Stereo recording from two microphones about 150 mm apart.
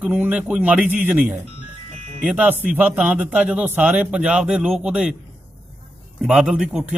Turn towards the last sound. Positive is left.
turn(degrees=-5)  # may be behind; listen again after turning